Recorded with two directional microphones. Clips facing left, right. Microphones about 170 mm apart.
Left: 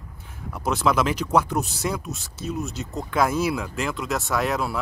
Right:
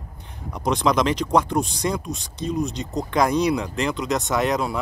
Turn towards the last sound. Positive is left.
turn(degrees=0)  # may be behind; listen again after turning